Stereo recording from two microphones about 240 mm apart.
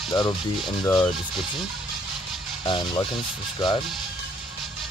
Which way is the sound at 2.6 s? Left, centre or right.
Centre.